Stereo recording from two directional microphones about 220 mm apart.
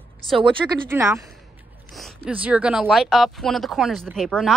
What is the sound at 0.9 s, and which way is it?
A woman's voice, 10° right (ahead or behind).